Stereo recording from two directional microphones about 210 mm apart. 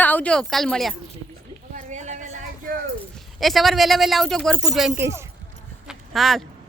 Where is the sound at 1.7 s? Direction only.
35° right (ahead or behind).